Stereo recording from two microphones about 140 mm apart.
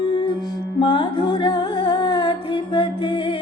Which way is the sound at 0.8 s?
35° left (ahead or behind).